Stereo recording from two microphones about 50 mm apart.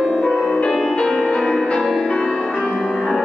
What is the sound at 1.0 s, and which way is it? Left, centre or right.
Music, centre.